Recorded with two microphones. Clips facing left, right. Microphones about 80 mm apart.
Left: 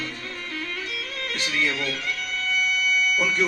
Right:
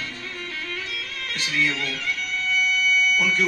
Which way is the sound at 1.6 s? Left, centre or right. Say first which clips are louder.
Even; left.